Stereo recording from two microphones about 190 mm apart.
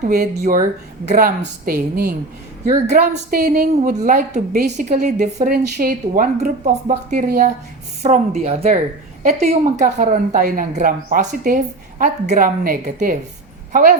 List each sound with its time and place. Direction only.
0.1 s a woman's voice: 50° right (ahead or behind)
2.6 s a woman's voice: 35° right (ahead or behind)
3.3 s a woman's voice: 55° right (ahead or behind)
5.5 s a woman's voice: 55° right (ahead or behind)